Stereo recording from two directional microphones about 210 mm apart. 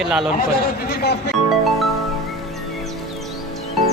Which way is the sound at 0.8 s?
50° left (ahead or behind).